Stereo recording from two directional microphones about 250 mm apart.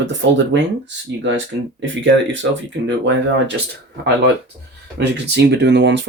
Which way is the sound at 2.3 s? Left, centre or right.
Right.